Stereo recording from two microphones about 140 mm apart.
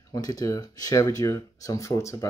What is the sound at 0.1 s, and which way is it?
Speech, 25° left (ahead or behind).